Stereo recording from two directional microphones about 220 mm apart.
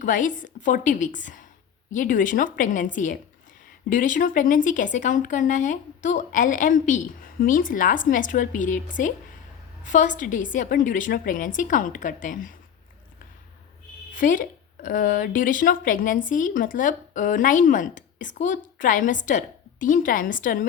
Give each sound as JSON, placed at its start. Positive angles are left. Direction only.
{"t": 0.0, "sound": "speech", "side_deg": 35}
{"t": 14.1, "sound": "speech", "side_deg": 40}